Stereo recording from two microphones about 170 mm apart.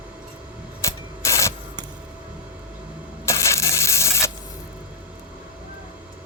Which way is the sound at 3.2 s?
15° left (ahead or behind).